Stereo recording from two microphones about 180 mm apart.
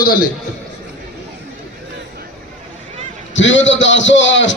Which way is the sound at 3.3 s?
90° left.